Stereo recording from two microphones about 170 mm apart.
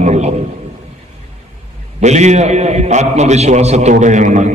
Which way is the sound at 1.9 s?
40° right (ahead or behind).